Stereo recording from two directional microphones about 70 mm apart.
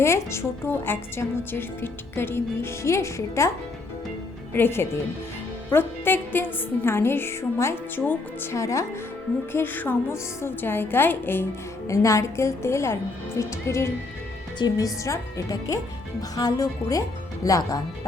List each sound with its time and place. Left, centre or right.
0.0 s speech: left
4.5 s speech: left
8.5 s a woman's voice: left
9.5 s speech: left
11.9 s a woman's voice: left
14.6 s a woman's voice: left